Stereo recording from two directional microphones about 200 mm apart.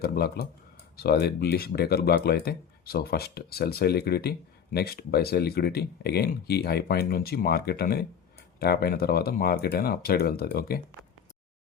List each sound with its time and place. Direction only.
0.0 s speech: 50° left (ahead or behind)